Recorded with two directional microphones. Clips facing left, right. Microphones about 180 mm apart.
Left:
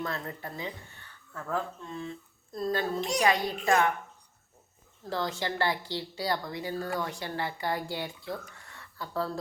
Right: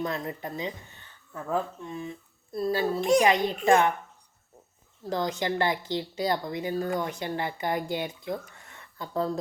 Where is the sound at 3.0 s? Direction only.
50° right (ahead or behind).